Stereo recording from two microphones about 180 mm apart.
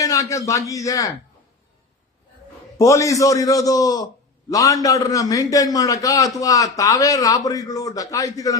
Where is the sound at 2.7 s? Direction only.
15° left (ahead or behind).